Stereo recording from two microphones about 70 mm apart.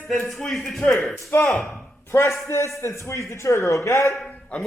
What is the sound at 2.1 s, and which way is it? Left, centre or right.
A man's voice, left.